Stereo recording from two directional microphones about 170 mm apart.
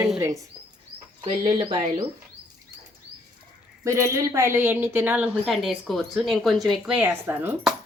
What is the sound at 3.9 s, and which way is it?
Speech, 15° right (ahead or behind).